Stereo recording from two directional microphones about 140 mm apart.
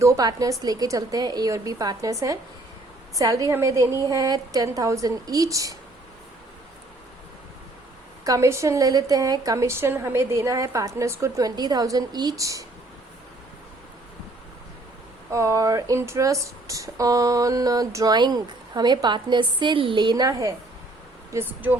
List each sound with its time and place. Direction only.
0.0 s speech: 25° right (ahead or behind)
8.2 s speech: 20° right (ahead or behind)
15.3 s speech: 20° right (ahead or behind)
21.3 s speech: 15° right (ahead or behind)